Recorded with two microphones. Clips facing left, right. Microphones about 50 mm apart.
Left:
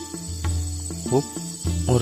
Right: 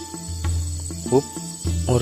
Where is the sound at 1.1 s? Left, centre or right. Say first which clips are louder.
Right 3 dB; centre.